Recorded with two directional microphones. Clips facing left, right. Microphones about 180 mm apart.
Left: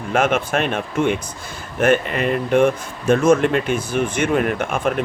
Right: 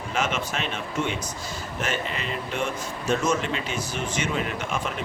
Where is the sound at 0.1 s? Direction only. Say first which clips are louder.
Left 9 dB; 55° left (ahead or behind).